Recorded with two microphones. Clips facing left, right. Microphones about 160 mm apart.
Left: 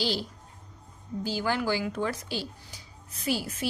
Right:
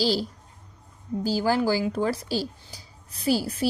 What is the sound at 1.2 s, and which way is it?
A woman's voice, 35° right (ahead or behind).